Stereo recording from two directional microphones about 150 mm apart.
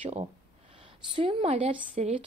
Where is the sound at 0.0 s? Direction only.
40° right (ahead or behind).